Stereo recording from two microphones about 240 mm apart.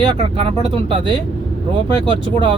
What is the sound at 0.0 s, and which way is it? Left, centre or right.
Speech, right.